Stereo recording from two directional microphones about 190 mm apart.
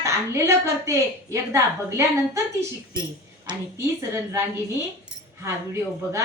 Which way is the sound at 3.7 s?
15° right (ahead or behind).